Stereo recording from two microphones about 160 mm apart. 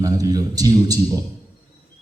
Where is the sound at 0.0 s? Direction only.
25° right (ahead or behind).